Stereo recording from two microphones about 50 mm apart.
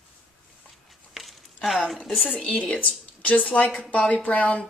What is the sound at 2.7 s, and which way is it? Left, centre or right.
Speech, left.